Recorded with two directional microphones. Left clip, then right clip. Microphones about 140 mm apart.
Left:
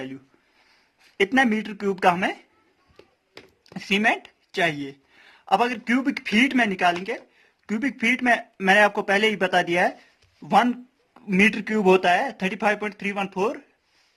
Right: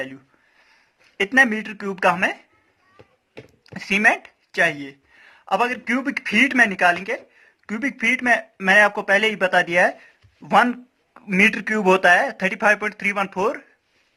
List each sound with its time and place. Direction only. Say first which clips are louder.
1.3 s speech: right 8 dB; 40° left (ahead or behind)
3.8 s a woman's voice: right 4 dB; 30° left (ahead or behind)